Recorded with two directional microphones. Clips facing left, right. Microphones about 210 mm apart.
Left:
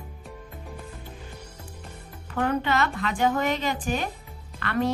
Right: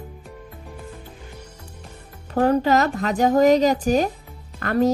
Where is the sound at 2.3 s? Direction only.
40° right (ahead or behind).